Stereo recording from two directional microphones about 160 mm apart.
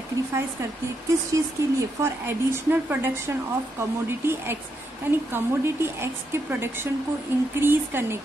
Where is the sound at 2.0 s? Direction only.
15° right (ahead or behind).